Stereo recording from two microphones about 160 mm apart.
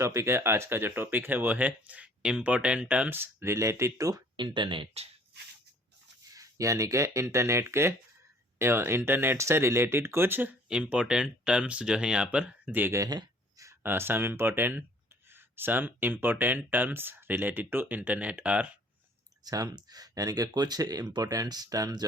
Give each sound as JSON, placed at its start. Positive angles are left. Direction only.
{"t": 0.0, "sound": "speech", "side_deg": -20}
{"t": 6.3, "sound": "speech", "side_deg": -20}
{"t": 19.5, "sound": "speech", "side_deg": -25}